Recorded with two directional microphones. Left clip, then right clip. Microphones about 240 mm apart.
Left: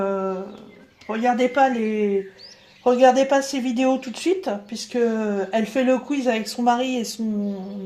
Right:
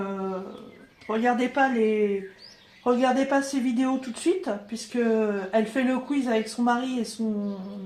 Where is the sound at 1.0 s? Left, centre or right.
Left.